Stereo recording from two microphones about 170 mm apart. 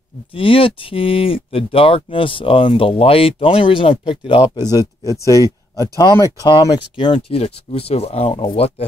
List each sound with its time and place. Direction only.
0.3 s speech: 30° left (ahead or behind)